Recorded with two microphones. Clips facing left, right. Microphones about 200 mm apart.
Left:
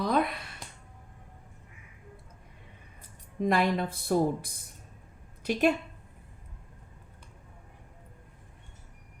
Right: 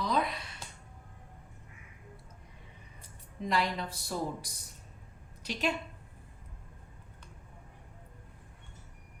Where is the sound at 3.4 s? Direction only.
55° left (ahead or behind).